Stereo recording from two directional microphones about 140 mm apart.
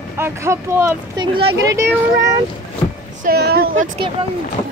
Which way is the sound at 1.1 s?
35° right (ahead or behind).